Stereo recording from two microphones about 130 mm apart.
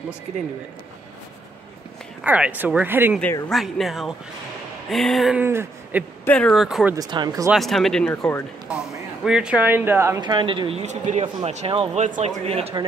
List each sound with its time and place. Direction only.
2.2 s speech: 10° right (ahead or behind)
3.4 s speech: centre (ahead or behind)
5.4 s speech: 15° right (ahead or behind)
6.2 s speech: 10° left (ahead or behind)
6.5 s speech: centre (ahead or behind)
7.0 s speech: 35° right (ahead or behind)
7.5 s speech: centre (ahead or behind); by 10.2 s 20° right (ahead or behind)
10.2 s speech: 35° right (ahead or behind)
10.8 s speech: 60° right (ahead or behind); by 12.0 s 45° right (ahead or behind)
12.0 s speech: 65° right (ahead or behind)
12.4 s speech: 50° right (ahead or behind)